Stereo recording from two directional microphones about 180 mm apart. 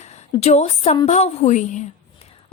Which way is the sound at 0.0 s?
40° left (ahead or behind).